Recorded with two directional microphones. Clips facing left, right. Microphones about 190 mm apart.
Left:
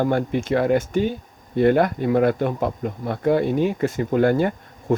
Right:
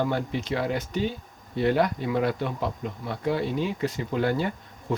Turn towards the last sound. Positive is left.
turn(degrees=50)  # may be behind; listen again after turning